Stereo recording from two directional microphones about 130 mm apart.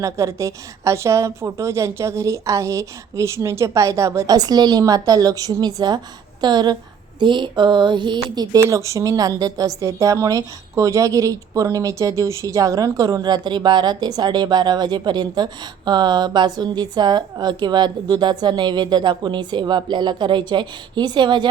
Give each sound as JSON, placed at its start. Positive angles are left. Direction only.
{"t": 0.0, "sound": "a woman's voice", "side_deg": -20}